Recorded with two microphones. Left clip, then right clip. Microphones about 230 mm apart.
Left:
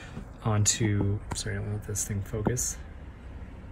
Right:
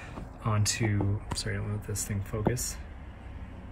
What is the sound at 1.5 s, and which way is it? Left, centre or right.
Speech, centre.